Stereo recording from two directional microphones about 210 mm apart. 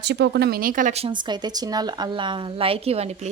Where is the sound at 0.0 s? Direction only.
55° right (ahead or behind).